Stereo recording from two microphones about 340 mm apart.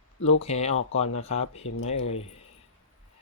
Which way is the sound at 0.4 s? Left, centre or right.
Centre.